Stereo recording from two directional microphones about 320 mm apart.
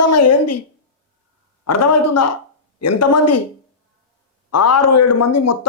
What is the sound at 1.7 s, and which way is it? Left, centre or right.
Speech, left.